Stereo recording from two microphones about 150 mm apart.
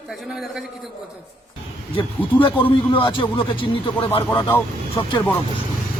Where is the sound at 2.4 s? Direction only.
35° left (ahead or behind).